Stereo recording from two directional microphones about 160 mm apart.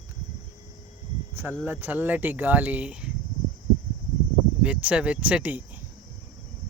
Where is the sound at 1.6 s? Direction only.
10° right (ahead or behind).